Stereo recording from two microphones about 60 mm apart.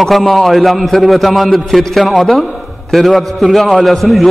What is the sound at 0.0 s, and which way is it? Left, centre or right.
A man's voice, centre.